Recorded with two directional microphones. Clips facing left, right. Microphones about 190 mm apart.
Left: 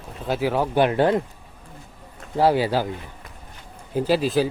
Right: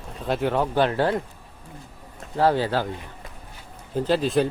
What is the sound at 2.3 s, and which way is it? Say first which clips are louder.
Speech: left 2 dB; 10° left (ahead or behind).